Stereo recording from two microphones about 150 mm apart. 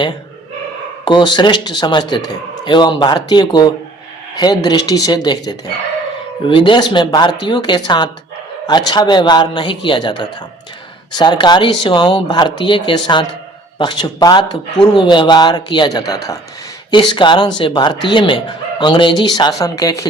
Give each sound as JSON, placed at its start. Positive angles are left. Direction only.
{"t": 1.0, "sound": "a man's voice", "side_deg": 30}